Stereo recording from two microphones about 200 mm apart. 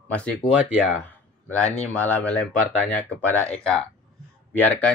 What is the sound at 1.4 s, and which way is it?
Speech, 5° left (ahead or behind).